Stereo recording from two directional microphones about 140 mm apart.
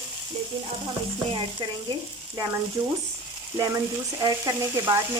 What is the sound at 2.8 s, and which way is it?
Speech, 30° right (ahead or behind).